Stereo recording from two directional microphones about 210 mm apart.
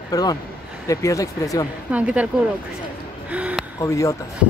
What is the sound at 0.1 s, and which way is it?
Speech, 20° left (ahead or behind).